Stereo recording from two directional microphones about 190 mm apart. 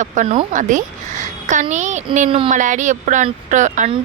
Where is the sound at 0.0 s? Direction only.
40° right (ahead or behind).